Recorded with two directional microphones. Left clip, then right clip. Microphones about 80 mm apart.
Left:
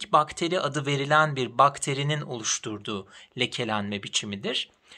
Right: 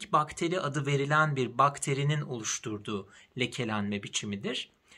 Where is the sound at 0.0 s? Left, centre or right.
Left.